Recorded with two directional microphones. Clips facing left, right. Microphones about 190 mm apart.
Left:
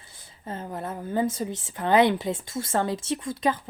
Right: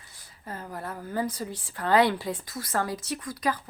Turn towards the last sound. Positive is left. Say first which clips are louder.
# left 4 dB
turn(degrees=25)  # may be behind; listen again after turning